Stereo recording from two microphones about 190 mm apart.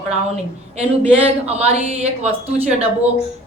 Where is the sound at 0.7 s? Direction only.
35° right (ahead or behind).